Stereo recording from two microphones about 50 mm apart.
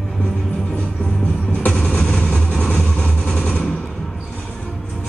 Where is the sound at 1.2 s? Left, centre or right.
Left.